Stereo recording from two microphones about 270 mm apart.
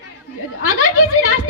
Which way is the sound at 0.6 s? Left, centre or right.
Left.